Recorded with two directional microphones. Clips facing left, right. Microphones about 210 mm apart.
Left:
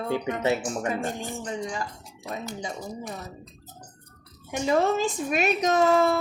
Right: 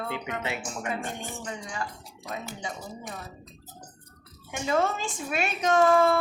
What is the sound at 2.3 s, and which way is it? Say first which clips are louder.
Speech: left 3 dB; 35° left (ahead or behind).